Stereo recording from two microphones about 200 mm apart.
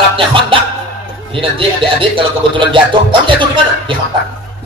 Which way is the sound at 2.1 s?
25° right (ahead or behind).